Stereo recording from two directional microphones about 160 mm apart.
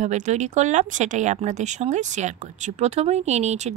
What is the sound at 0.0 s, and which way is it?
Speech, 45° right (ahead or behind).